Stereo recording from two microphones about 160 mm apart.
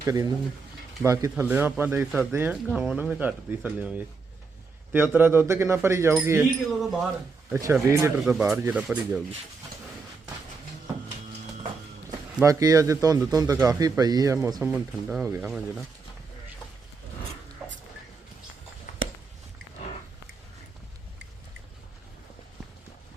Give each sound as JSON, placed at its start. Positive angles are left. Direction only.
{"t": 0.0, "sound": "speech", "side_deg": -20}
{"t": 6.7, "sound": "speech", "side_deg": -5}
{"t": 7.5, "sound": "speech", "side_deg": -15}
{"t": 8.2, "sound": "speech", "side_deg": -5}
{"t": 12.4, "sound": "a man's voice", "side_deg": -20}
{"t": 15.4, "sound": "speech", "side_deg": -5}